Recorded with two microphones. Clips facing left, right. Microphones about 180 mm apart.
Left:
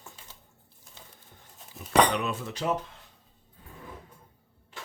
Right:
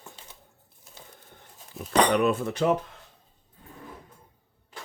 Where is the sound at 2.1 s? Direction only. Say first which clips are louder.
Right 8 dB; 55° right (ahead or behind).